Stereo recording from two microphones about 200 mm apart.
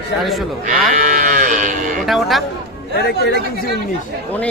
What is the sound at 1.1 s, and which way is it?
Livestock, 40° right (ahead or behind).